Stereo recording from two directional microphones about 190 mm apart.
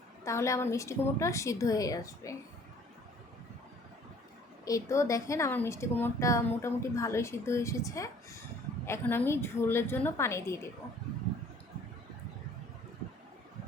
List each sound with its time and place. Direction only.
0.3 s a woman's voice: 15° left (ahead or behind)
4.6 s a woman's voice: 15° left (ahead or behind)